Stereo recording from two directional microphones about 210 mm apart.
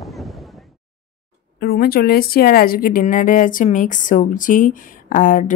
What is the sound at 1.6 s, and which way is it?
Speech, 45° left (ahead or behind).